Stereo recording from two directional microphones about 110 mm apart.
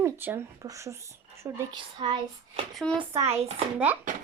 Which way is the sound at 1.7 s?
45° right (ahead or behind).